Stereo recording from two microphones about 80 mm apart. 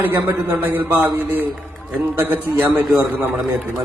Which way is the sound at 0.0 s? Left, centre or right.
Right.